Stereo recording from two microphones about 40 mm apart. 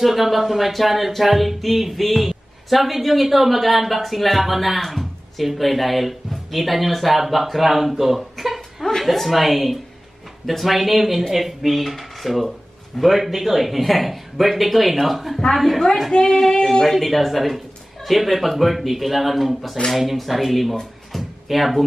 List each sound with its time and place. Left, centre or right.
0.0 s speech: centre
16.1 s speech: centre
16.8 s speech: centre
21.1 s a sound: centre